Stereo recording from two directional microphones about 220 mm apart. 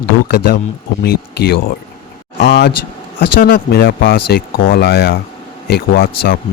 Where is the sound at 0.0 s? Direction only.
50° left (ahead or behind).